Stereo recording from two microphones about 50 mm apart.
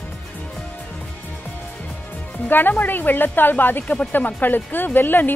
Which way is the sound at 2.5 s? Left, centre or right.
Left.